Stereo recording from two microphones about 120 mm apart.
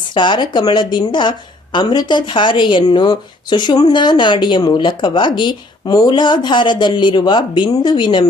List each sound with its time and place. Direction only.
0.1 s speech: 40° left (ahead or behind)